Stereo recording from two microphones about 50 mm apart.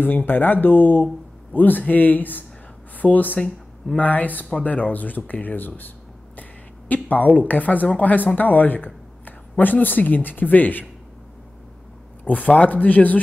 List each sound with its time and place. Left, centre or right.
0.0 s speech: left
3.3 s speech: centre
3.9 s speech: left
6.9 s speech: left
12.3 s speech: left